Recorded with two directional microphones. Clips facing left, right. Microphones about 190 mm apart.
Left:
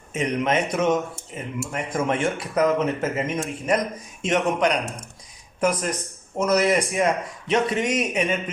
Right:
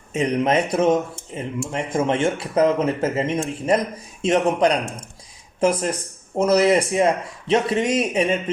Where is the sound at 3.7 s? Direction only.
30° right (ahead or behind).